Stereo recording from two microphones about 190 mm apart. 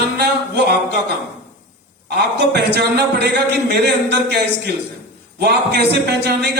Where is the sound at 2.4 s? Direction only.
60° right (ahead or behind).